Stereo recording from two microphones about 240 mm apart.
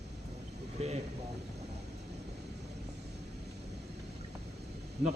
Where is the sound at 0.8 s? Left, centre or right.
Right.